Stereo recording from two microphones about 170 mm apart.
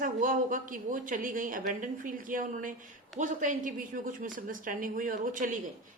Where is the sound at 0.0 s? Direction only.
50° right (ahead or behind).